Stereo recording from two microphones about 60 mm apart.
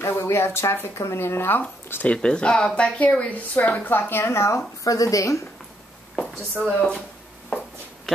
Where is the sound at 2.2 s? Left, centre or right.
Centre.